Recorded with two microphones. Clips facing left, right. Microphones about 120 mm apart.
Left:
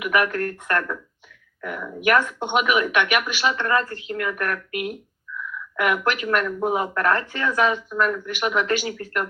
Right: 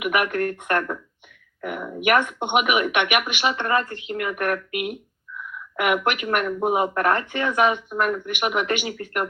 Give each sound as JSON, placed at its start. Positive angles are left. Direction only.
{"t": 0.0, "sound": "speech", "side_deg": -20}